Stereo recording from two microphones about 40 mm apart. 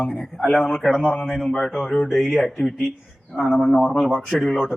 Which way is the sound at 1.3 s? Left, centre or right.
Centre.